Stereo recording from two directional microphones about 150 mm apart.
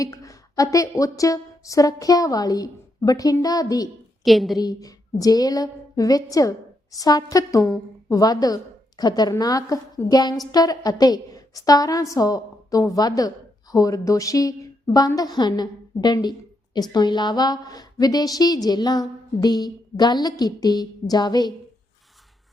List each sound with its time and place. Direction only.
0.0 s a woman's voice: 20° left (ahead or behind)
4.2 s a woman's voice: centre (ahead or behind)
4.5 s a woman's voice: 25° left (ahead or behind)